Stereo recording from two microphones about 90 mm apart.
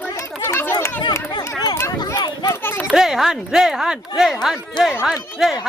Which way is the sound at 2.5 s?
25° left (ahead or behind).